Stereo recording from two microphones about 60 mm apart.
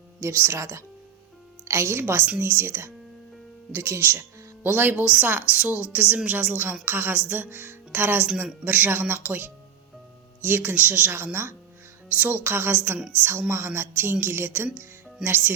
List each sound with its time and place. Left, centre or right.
0.2 s speech: right
0.6 s speech: right
5.0 s speech: right
10.8 s speech: right